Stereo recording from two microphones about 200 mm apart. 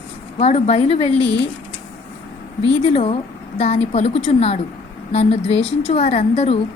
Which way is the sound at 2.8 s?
30° left (ahead or behind).